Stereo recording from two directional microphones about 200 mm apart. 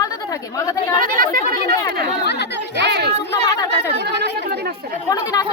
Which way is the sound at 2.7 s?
55° right (ahead or behind).